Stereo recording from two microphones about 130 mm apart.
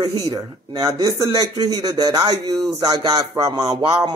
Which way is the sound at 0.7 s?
30° right (ahead or behind).